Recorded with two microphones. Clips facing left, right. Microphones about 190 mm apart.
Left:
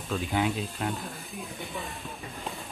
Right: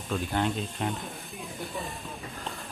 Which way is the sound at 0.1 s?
Centre (ahead or behind).